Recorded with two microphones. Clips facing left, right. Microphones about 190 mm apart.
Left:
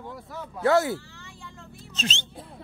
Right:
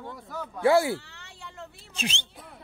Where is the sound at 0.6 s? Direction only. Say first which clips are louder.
Even; 10° right (ahead or behind).